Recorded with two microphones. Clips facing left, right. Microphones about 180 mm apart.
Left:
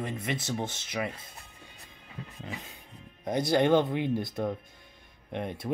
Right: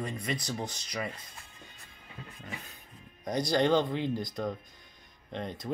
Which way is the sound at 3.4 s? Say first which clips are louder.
Left 2 dB; 10° left (ahead or behind).